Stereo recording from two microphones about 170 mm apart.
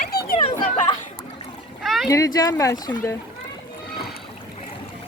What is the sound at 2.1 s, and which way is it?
Speech, 20° left (ahead or behind).